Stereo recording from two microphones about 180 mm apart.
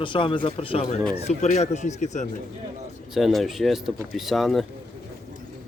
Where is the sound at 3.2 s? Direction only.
Centre (ahead or behind).